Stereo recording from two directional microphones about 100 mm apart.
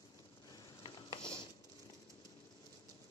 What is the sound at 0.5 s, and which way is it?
Patter, 45° left (ahead or behind).